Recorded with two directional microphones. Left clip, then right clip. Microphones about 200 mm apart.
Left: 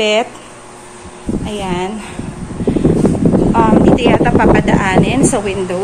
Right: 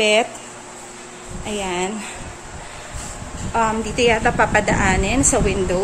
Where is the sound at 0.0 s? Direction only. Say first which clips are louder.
Left 3 dB; centre (ahead or behind).